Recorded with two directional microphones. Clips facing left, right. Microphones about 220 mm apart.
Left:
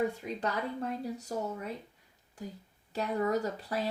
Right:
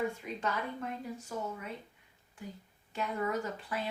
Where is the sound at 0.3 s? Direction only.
35° left (ahead or behind).